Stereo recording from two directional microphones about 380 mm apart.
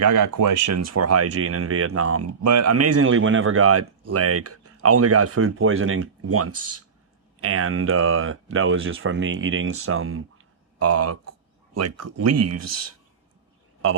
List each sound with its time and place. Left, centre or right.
0.0 s speech: right
13.8 s a man's voice: right